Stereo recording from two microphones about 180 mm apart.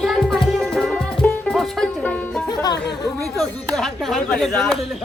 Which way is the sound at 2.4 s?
20° left (ahead or behind).